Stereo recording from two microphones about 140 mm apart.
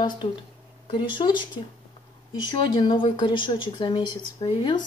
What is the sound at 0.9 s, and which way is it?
Speech, 35° left (ahead or behind).